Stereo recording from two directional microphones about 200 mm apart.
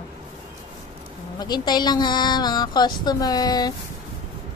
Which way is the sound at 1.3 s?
20° left (ahead or behind).